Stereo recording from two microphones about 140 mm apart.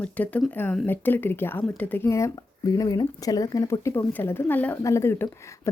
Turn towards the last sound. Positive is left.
turn(degrees=20)  # may be behind; listen again after turning